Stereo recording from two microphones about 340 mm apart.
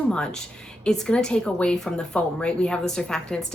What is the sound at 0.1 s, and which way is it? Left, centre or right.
Speech, centre.